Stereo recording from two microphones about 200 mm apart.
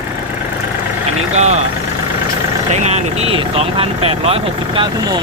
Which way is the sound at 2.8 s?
35° right (ahead or behind).